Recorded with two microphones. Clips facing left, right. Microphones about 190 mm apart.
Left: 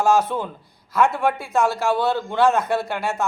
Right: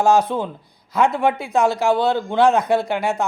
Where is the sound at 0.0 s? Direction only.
15° right (ahead or behind).